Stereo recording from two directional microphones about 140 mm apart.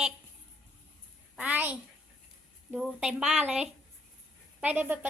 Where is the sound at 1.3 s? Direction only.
10° right (ahead or behind).